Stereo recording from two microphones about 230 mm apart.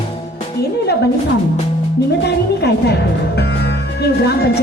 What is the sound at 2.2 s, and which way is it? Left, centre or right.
Music, left.